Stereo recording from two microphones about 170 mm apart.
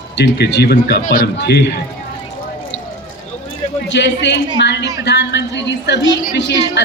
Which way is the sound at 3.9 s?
90° left.